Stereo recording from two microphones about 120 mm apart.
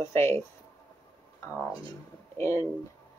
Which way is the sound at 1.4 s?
20° left (ahead or behind).